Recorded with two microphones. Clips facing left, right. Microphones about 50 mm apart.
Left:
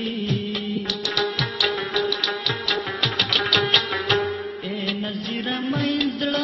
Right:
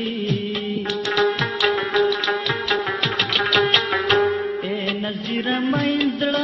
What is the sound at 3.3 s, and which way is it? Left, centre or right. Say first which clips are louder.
Music: right 3 dB; centre.